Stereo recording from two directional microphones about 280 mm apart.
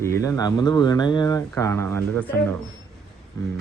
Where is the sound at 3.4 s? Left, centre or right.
Centre.